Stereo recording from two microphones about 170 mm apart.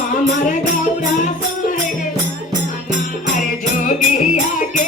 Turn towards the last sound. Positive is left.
turn(degrees=50)  # may be behind; listen again after turning